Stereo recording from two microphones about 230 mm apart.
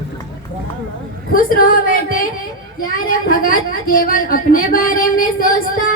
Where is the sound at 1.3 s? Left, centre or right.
Left.